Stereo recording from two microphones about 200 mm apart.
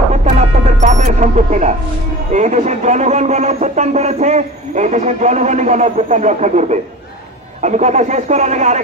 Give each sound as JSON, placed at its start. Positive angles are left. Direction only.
{"t": 0.1, "sound": "music", "side_deg": -35}
{"t": 2.3, "sound": "speech", "side_deg": -35}